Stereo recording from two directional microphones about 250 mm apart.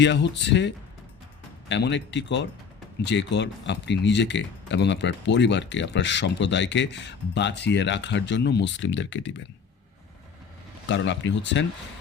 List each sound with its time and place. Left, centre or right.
0.0 s speech: left
1.7 s speech: left
10.8 s speech: left